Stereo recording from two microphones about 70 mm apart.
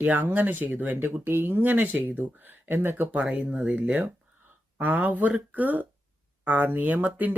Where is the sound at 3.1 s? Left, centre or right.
Centre.